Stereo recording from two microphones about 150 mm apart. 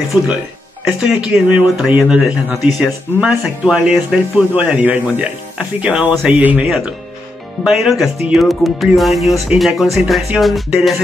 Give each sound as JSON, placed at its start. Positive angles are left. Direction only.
{"t": 0.8, "sound": "speech", "side_deg": -5}